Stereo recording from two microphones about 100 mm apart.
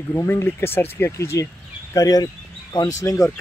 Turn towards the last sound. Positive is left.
turn(degrees=35)  # may be behind; listen again after turning